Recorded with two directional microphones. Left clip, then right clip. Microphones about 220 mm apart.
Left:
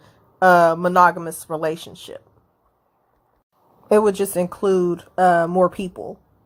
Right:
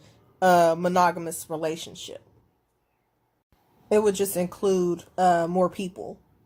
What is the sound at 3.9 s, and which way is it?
A woman's voice, 15° left (ahead or behind).